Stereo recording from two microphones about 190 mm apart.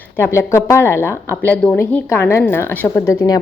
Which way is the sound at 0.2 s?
15° left (ahead or behind).